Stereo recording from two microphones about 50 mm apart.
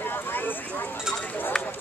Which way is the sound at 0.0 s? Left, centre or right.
Left.